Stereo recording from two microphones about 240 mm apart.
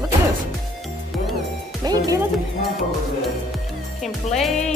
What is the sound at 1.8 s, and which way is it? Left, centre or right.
Speech, centre.